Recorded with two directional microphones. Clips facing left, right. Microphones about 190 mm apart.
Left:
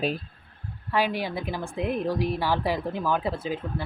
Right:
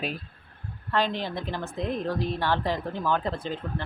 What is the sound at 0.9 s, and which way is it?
A woman's voice, 10° left (ahead or behind).